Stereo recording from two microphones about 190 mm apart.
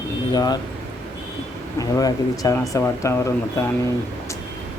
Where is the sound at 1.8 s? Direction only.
20° left (ahead or behind).